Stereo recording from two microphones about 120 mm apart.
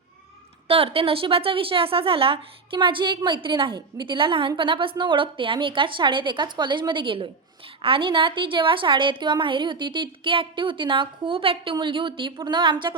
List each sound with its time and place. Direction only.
0.7 s a woman's voice: 50° right (ahead or behind)